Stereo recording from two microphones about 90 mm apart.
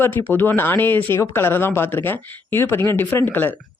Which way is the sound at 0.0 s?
25° left (ahead or behind).